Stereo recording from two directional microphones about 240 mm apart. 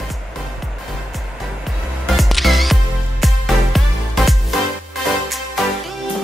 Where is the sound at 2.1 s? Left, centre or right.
Centre.